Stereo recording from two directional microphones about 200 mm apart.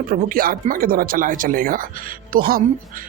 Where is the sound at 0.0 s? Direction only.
45° right (ahead or behind).